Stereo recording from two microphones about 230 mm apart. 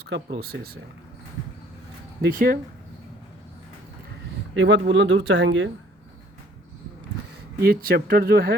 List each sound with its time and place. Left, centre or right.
0.0 s speech: right
2.2 s speech: right
4.5 s speech: right
7.6 s speech: right